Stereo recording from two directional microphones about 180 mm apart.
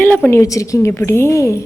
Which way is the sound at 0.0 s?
10° left (ahead or behind).